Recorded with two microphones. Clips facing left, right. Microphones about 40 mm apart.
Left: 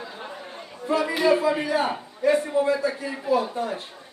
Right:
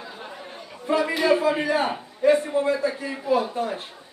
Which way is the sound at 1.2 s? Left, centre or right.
Right.